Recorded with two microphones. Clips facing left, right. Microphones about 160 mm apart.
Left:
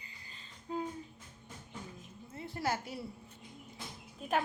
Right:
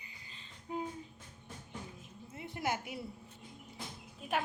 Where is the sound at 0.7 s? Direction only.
20° right (ahead or behind).